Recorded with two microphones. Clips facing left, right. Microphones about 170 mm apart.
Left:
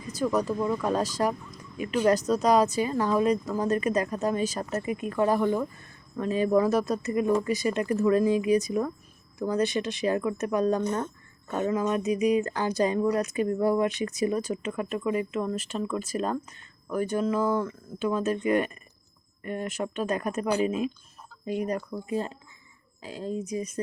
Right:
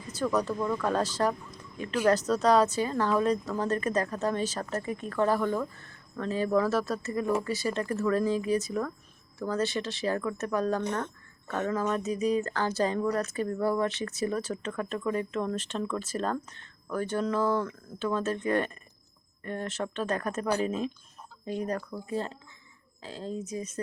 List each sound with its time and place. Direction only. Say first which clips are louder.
0.1 s speech: left 2 dB; 10° left (ahead or behind)